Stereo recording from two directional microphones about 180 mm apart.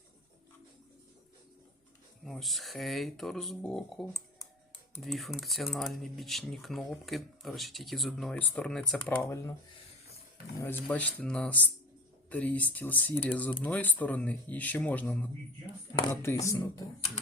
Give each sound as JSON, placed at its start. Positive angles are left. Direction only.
{"t": 2.2, "sound": "speech", "side_deg": 0}
{"t": 10.6, "sound": "speech", "side_deg": 10}